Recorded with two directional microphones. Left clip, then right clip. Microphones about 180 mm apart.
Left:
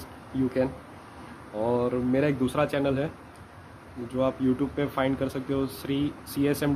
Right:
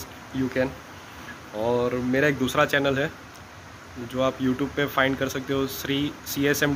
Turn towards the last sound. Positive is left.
turn(degrees=5)  # may be behind; listen again after turning